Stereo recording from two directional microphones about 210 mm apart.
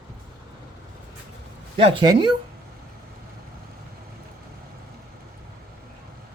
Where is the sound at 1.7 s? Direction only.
25° right (ahead or behind).